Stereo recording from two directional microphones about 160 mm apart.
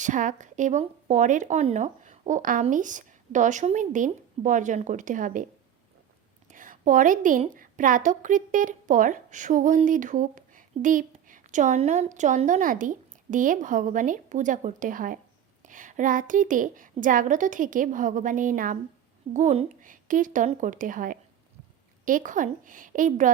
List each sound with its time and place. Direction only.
0.0 s speech: 50° right (ahead or behind)
6.5 s a sound: 55° right (ahead or behind)
7.5 s a woman's voice: 60° right (ahead or behind)